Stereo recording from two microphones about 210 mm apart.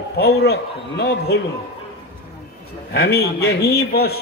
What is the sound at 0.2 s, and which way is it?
A man's voice, 50° left (ahead or behind).